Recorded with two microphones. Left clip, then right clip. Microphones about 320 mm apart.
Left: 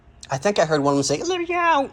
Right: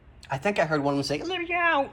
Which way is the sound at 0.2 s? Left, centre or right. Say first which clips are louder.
Left 5 dB; centre.